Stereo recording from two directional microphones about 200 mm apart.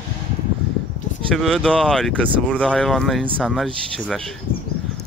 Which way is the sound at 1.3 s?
Centre (ahead or behind).